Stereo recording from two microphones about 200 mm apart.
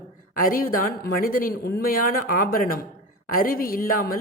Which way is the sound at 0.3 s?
45° left (ahead or behind).